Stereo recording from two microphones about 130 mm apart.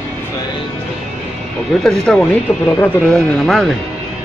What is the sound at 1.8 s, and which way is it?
Speech, 5° left (ahead or behind).